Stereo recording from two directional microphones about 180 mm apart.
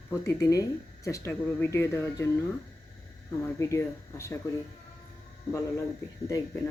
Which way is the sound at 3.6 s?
15° left (ahead or behind).